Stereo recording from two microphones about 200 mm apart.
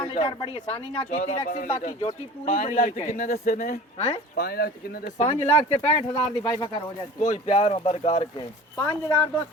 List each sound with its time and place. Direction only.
0.0 s speech: 25° left (ahead or behind)
4.4 s speech: 50° left (ahead or behind)
5.1 s speech: 35° left (ahead or behind)
8.8 s speech: 10° left (ahead or behind)